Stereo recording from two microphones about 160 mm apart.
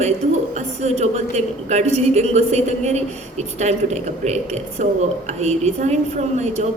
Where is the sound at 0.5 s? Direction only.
45° right (ahead or behind).